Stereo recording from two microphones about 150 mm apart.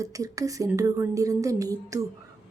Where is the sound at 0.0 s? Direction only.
20° right (ahead or behind).